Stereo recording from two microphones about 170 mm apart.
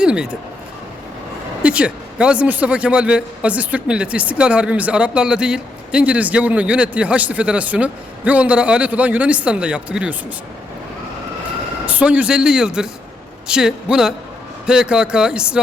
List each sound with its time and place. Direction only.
0.0 s speech: 5° right (ahead or behind)
1.6 s a man's voice: 5° right (ahead or behind)
11.9 s speech: 10° right (ahead or behind)